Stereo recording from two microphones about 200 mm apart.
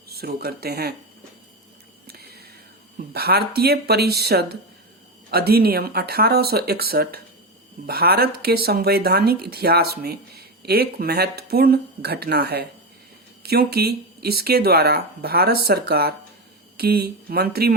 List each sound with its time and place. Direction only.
0.1 s speech: 50° right (ahead or behind)
2.0 s whispering: 50° right (ahead or behind)
3.1 s speech: 50° right (ahead or behind)